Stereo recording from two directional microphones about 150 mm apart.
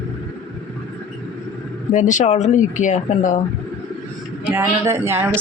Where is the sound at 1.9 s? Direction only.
55° left (ahead or behind).